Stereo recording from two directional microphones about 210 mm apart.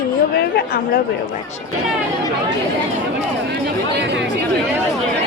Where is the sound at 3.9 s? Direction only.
55° right (ahead or behind).